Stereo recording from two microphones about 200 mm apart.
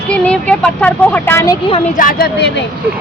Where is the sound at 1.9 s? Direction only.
45° left (ahead or behind).